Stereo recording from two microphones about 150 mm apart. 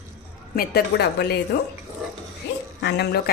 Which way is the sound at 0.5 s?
90° left.